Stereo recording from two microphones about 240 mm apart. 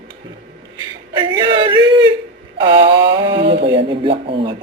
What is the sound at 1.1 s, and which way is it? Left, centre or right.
A woman's voice, centre.